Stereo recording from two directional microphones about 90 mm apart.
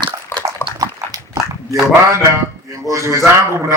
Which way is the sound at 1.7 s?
35° right (ahead or behind).